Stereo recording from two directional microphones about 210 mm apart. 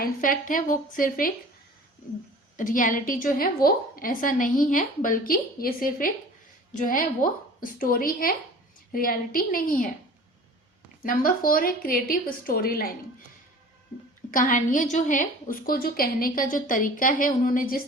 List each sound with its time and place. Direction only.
0.0 s a woman's voice: 40° left (ahead or behind)
2.6 s a woman's voice: 40° left (ahead or behind)
11.0 s a woman's voice: 40° left (ahead or behind)
14.3 s a woman's voice: 40° left (ahead or behind)